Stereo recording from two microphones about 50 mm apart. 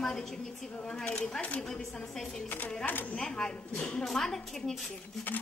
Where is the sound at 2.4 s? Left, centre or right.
Left.